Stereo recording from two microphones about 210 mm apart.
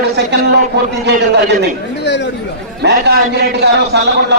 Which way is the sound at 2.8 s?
55° right (ahead or behind).